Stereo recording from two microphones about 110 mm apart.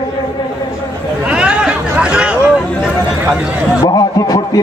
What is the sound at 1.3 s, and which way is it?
Chatter, 10° right (ahead or behind).